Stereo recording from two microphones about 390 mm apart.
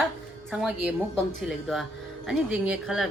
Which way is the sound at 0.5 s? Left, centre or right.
Centre.